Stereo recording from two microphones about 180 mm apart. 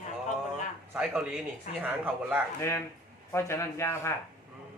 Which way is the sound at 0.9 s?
5° right (ahead or behind).